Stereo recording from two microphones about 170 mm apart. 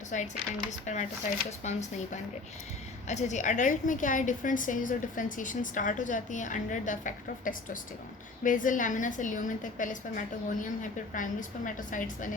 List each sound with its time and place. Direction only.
0.1 s a woman's voice: 45° left (ahead or behind)
3.1 s a woman's voice: 45° left (ahead or behind)